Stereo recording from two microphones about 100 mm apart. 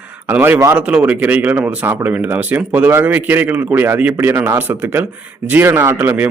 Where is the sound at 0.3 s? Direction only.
20° right (ahead or behind).